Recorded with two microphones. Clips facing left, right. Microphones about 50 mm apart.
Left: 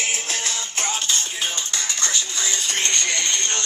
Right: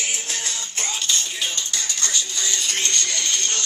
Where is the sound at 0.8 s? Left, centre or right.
Left.